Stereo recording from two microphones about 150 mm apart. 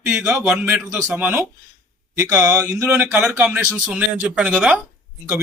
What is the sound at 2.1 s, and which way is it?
Speech, 20° right (ahead or behind).